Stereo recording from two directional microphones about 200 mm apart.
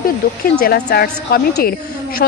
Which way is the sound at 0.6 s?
50° left (ahead or behind).